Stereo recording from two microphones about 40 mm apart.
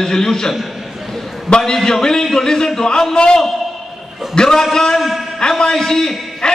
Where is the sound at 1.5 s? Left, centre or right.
Centre.